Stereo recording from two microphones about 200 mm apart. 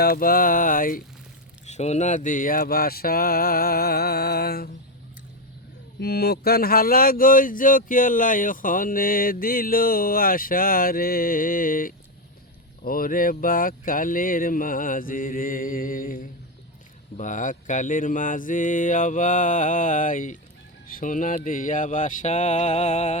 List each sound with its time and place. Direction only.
0.0 s speech: 45° left (ahead or behind)
1.6 s speech: 35° left (ahead or behind); by 4.7 s 50° left (ahead or behind)
6.0 s speech: 55° left (ahead or behind); by 23.1 s 35° left (ahead or behind)